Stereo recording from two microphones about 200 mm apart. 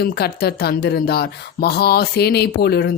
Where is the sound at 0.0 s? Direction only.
50° left (ahead or behind).